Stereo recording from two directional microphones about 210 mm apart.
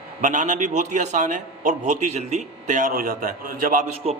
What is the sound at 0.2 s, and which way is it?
A man's voice, 35° right (ahead or behind).